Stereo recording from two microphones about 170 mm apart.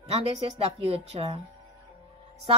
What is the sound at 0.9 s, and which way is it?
Speech, 40° right (ahead or behind).